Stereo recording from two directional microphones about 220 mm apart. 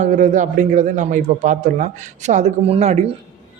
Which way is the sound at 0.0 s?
35° right (ahead or behind).